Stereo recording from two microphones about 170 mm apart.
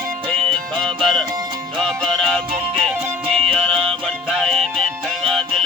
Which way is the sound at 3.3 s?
35° right (ahead or behind).